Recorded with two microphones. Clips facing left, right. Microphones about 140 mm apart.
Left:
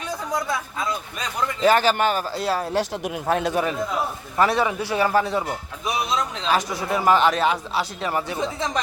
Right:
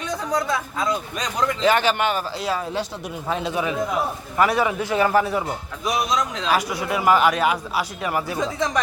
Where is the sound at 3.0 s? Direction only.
55° left (ahead or behind).